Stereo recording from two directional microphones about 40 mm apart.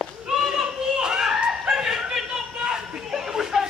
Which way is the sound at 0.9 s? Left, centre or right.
Right.